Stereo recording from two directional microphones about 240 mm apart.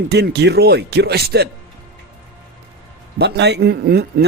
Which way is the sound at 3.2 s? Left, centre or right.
Right.